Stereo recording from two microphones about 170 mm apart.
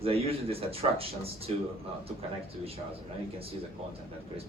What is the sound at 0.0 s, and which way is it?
Speech, 35° right (ahead or behind).